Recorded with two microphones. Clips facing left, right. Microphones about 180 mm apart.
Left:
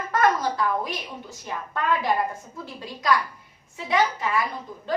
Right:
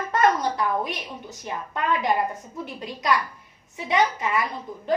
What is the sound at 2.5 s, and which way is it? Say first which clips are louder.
A woman's voice: right 3 dB; 20° right (ahead or behind).